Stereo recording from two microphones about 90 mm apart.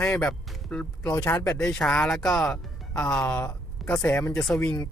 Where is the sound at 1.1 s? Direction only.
35° left (ahead or behind).